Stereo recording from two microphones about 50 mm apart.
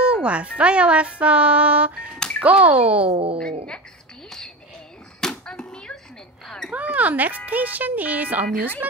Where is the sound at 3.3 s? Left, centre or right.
Centre.